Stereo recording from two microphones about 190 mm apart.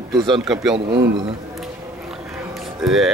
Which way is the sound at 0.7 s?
60° right (ahead or behind).